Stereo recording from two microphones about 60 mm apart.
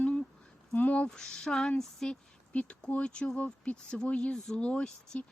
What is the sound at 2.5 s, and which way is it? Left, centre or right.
Speech, left.